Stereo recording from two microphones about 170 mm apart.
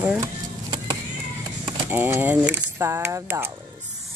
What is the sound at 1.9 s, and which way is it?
Speech, 10° right (ahead or behind).